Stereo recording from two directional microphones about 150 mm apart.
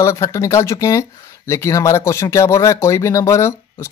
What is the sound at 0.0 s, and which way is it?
Speech, 20° left (ahead or behind).